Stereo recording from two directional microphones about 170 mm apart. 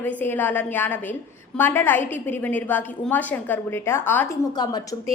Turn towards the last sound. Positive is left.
turn(degrees=25)  # may be behind; listen again after turning